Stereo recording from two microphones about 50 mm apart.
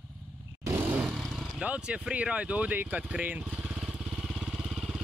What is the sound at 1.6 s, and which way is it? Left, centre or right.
Speech, right.